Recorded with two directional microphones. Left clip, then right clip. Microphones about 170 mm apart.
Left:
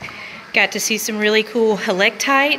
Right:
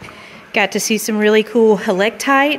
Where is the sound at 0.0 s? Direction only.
30° right (ahead or behind).